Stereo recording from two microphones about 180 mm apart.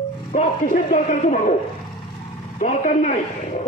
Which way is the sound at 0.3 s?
45° left (ahead or behind).